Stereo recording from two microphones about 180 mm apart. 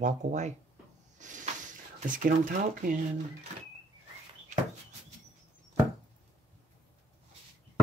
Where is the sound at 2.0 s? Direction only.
45° right (ahead or behind).